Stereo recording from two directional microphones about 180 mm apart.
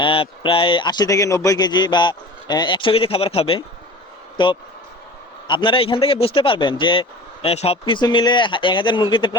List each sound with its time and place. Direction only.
0.0 s a man's voice: 30° left (ahead or behind)